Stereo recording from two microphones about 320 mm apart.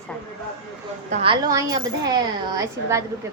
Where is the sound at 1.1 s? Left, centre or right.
Centre.